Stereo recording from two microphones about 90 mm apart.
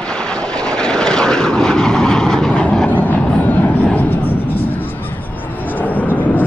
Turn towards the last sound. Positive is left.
turn(degrees=20)  # may be behind; listen again after turning